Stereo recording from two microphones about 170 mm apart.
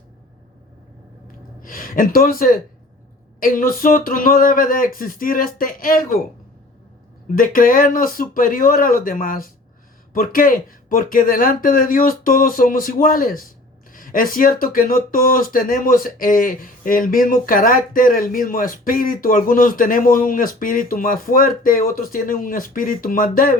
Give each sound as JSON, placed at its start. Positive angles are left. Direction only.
{"t": 1.6, "sound": "speech", "side_deg": 55}
{"t": 7.3, "sound": "speech", "side_deg": 55}